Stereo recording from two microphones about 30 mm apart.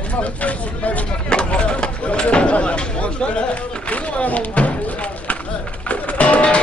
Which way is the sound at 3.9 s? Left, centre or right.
Left.